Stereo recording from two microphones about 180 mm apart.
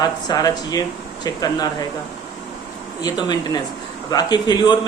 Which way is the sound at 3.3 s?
20° left (ahead or behind).